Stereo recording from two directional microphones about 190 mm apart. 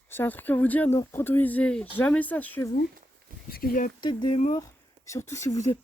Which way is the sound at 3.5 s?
50° left (ahead or behind).